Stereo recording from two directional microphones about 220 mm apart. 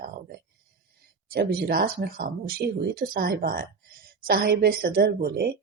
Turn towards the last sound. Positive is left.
turn(degrees=-45)  # may be behind; listen again after turning